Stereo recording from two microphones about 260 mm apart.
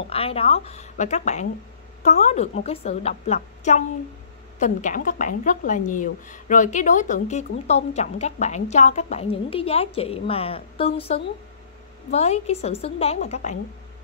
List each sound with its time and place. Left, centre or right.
0.1 s a woman's voice: left